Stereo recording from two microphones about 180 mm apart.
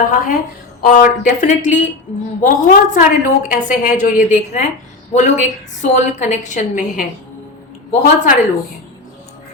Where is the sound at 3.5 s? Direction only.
45° left (ahead or behind).